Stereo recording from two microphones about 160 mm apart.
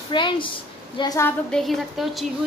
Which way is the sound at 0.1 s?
30° left (ahead or behind).